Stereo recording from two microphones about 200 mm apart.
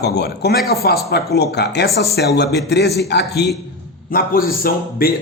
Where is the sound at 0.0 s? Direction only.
55° left (ahead or behind).